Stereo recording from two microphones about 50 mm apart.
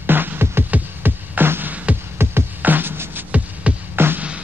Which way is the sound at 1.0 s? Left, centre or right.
Right.